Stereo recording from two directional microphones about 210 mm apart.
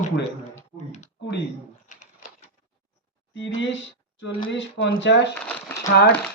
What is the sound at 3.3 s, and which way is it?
Speech, 60° left (ahead or behind).